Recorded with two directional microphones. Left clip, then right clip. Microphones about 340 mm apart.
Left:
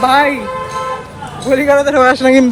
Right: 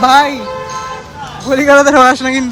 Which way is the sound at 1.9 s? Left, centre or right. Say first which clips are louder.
Even; centre.